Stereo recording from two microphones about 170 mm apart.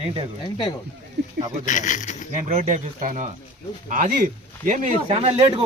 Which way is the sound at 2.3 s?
45° right (ahead or behind).